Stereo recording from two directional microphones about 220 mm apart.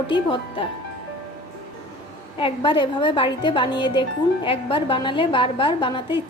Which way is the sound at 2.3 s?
25° left (ahead or behind).